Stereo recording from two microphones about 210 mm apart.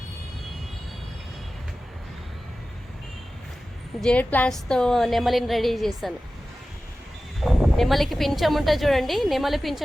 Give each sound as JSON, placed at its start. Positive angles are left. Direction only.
{"t": 4.0, "sound": "a woman's voice", "side_deg": 5}
{"t": 7.3, "sound": "a woman's voice", "side_deg": 0}